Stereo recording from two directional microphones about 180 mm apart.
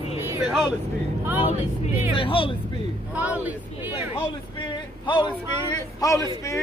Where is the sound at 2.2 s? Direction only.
30° left (ahead or behind).